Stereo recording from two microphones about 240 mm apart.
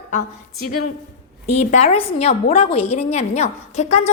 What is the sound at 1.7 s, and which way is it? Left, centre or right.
A woman's voice, left.